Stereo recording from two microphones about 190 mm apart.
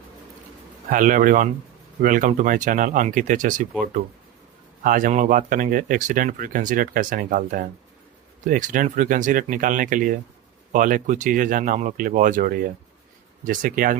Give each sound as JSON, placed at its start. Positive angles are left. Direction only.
{"t": 0.9, "sound": "speech", "side_deg": -45}